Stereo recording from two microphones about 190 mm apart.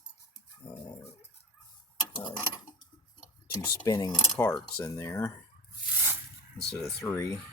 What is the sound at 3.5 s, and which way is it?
Speech, 20° left (ahead or behind).